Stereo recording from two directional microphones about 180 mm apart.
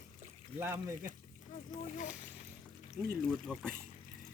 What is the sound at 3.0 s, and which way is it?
Speech, 5° right (ahead or behind).